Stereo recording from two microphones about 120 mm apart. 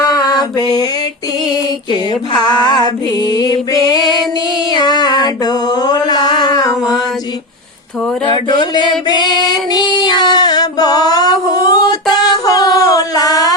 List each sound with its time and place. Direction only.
0.0 s mantra: 35° left (ahead or behind)
2.4 s music: 40° left (ahead or behind)
4.7 s mantra: 35° left (ahead or behind)
8.2 s music: 40° left (ahead or behind)
9.0 s female singing: 35° left (ahead or behind)